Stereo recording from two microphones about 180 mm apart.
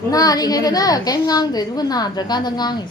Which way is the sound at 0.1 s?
20° left (ahead or behind).